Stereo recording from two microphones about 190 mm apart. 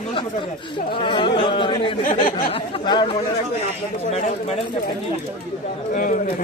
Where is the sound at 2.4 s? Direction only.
30° left (ahead or behind).